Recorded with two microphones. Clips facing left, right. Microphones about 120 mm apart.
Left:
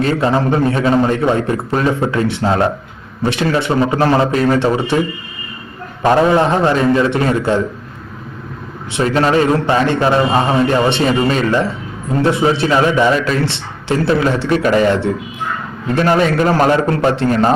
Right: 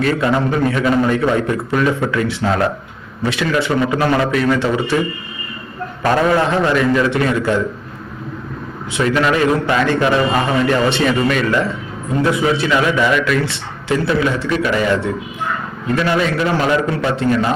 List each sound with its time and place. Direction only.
0.0 s a man's voice: 30° left (ahead or behind)
6.0 s a man's voice: 25° left (ahead or behind)
9.0 s a man's voice: 35° left (ahead or behind)
16.0 s a man's voice: 40° left (ahead or behind)